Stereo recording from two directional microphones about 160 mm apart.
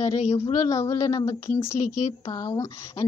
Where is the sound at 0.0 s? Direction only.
45° left (ahead or behind).